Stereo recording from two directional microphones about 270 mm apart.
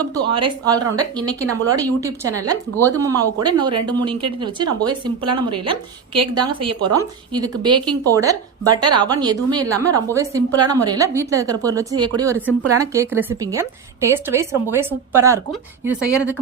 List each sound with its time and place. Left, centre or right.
0.0 s a woman's voice: centre